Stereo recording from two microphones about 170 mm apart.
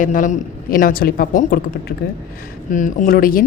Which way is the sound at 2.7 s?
45° left (ahead or behind).